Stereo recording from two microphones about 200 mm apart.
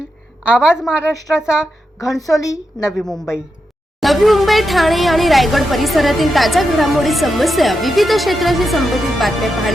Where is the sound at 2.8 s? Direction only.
Centre (ahead or behind).